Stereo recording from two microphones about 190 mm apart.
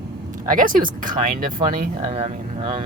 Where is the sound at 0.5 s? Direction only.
45° right (ahead or behind).